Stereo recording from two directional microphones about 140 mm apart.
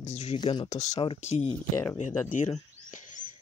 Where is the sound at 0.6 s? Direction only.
55° left (ahead or behind).